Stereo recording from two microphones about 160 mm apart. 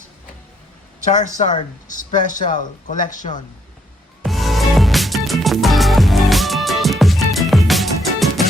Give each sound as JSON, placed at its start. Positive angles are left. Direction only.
{"t": 1.0, "sound": "speech", "side_deg": 50}
{"t": 4.2, "sound": "music", "side_deg": 0}